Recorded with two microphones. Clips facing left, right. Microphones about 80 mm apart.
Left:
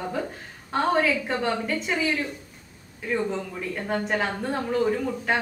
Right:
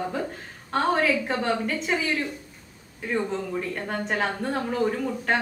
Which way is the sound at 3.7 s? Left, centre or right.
Centre.